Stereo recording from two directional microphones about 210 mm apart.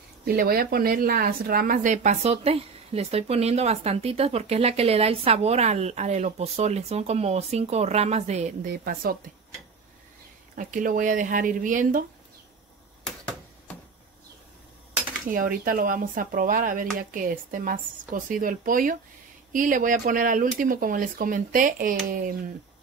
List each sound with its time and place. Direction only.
0.2 s a woman's voice: 45° right (ahead or behind)
8.7 s a woman's voice: 45° right (ahead or behind)
10.5 s a woman's voice: 40° right (ahead or behind)
15.2 s a woman's voice: 40° right (ahead or behind)